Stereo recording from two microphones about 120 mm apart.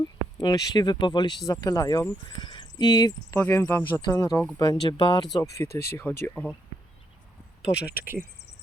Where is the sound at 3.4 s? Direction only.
20° left (ahead or behind).